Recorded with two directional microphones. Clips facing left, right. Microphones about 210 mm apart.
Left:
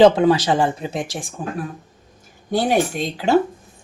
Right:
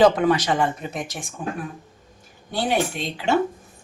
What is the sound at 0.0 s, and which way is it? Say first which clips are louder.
Speech: left 4 dB; 30° left (ahead or behind).